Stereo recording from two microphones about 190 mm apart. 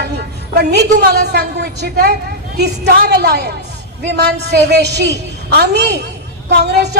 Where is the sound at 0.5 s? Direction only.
60° right (ahead or behind).